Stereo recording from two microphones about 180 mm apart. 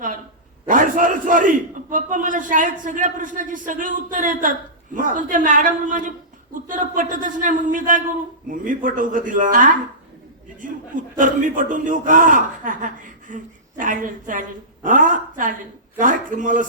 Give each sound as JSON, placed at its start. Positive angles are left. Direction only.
{"t": 0.7, "sound": "a man's voice", "side_deg": -50}
{"t": 11.2, "sound": "a man's voice", "side_deg": -45}